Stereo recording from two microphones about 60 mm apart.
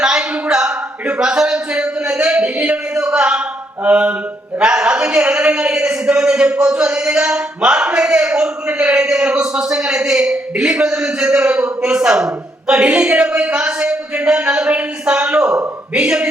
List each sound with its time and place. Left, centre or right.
0.0 s a man's voice: centre